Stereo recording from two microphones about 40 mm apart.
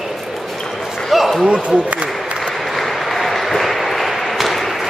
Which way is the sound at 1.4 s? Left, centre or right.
Right.